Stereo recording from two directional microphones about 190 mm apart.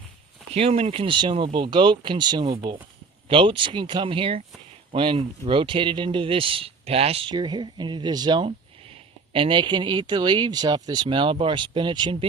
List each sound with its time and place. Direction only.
0.5 s speech: 30° right (ahead or behind)